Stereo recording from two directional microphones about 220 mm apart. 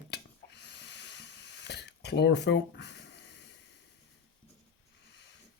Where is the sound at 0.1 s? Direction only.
50° left (ahead or behind).